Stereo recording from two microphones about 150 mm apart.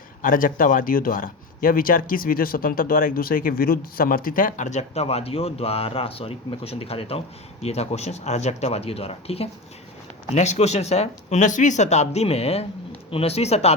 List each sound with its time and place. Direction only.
0.2 s speech: 65° left (ahead or behind); by 13.7 s 45° left (ahead or behind)